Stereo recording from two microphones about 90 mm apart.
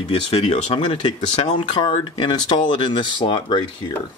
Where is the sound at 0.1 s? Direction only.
90° left; by 3.6 s 60° left (ahead or behind).